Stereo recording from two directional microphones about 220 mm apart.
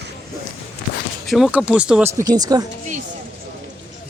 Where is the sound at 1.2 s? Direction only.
Centre (ahead or behind); by 2.7 s 15° right (ahead or behind).